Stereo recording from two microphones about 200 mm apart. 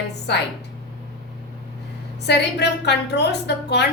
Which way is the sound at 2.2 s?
55° left (ahead or behind).